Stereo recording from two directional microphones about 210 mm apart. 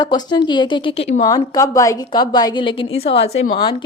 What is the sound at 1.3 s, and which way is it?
A woman's voice, 15° left (ahead or behind).